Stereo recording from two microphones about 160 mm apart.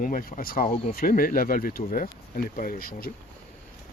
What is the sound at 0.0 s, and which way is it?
Speech, 60° left (ahead or behind).